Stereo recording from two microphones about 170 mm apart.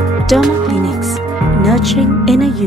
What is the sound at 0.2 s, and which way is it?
Speech, centre (ahead or behind).